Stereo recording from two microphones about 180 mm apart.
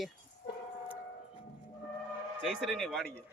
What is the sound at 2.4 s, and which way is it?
Speech, centre (ahead or behind).